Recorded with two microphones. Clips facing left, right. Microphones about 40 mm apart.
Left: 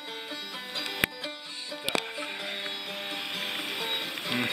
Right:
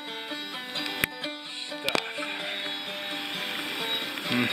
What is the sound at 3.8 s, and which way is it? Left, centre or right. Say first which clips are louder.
Music: right 1 dB; centre.